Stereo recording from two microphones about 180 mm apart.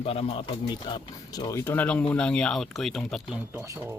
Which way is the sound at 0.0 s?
30° left (ahead or behind).